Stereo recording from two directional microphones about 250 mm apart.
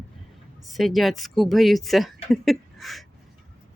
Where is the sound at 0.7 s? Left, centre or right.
Centre.